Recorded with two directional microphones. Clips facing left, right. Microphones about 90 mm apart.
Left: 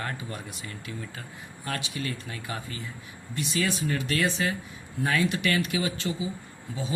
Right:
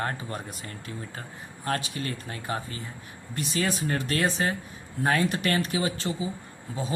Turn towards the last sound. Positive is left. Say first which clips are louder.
# right 1 dB
turn(degrees=-40)  # may be behind; listen again after turning